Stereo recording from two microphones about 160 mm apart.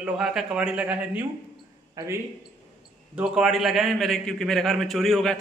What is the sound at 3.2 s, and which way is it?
A man's voice, 5° right (ahead or behind).